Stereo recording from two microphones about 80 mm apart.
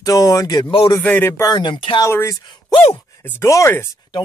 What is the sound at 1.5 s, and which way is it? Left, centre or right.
Speech, left.